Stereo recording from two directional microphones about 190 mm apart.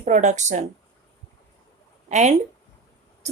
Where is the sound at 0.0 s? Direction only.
40° right (ahead or behind).